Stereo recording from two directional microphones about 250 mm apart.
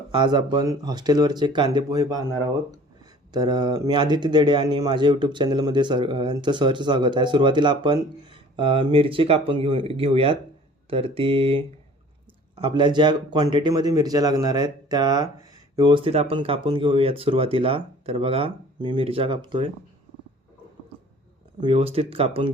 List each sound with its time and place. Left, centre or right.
0.1 s speech: centre
3.3 s speech: centre
21.6 s speech: right